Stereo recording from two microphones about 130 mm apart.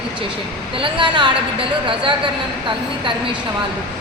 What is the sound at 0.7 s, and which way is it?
A woman's voice, 40° right (ahead or behind).